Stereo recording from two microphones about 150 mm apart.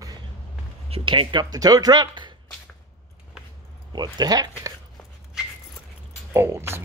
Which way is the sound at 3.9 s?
30° right (ahead or behind).